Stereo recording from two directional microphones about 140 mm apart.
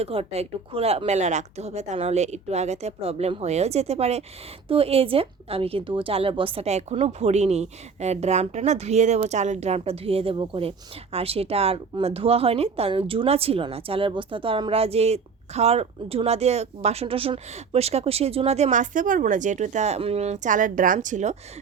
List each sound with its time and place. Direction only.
0.0 s speech: 45° right (ahead or behind)